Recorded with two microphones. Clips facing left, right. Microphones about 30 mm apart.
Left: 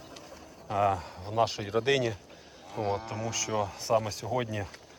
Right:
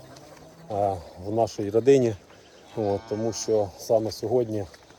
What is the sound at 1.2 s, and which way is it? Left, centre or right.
Speech, left.